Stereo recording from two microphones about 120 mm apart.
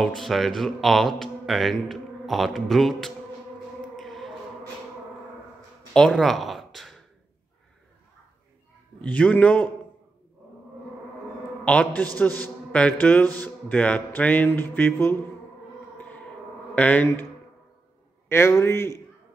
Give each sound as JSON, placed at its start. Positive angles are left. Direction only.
{"t": 0.0, "sound": "speech", "side_deg": 0}
{"t": 3.9, "sound": "a sound", "side_deg": 0}
{"t": 5.9, "sound": "speech", "side_deg": 5}
{"t": 9.0, "sound": "speech", "side_deg": 10}
{"t": 11.6, "sound": "speech", "side_deg": 10}
{"t": 16.7, "sound": "speech", "side_deg": 10}
{"t": 18.3, "sound": "a man's voice", "side_deg": 20}